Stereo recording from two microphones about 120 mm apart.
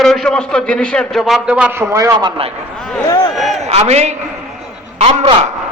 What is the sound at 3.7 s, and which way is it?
A man's voice, 65° right (ahead or behind).